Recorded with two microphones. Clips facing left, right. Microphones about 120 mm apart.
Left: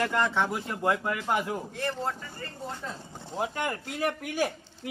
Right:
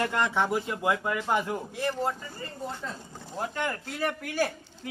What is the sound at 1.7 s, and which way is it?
Speech, 10° right (ahead or behind).